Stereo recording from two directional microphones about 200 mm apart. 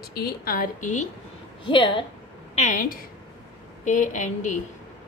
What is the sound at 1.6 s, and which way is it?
Speech, 25° left (ahead or behind).